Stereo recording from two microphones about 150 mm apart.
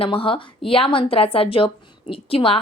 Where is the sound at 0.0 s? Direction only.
35° left (ahead or behind).